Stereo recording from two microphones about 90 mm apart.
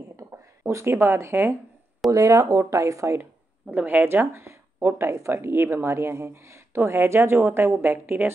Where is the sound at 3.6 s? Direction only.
15° right (ahead or behind).